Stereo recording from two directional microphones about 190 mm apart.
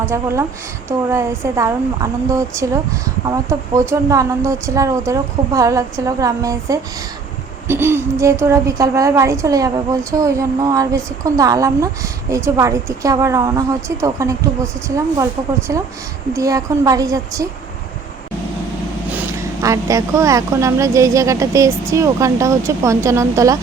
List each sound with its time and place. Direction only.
0.0 s speech: 15° right (ahead or behind)
19.6 s speech: 15° right (ahead or behind)